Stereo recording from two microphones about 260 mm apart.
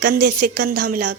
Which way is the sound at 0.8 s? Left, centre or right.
Right.